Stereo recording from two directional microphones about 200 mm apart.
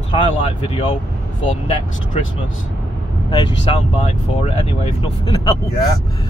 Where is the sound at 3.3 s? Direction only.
30° left (ahead or behind).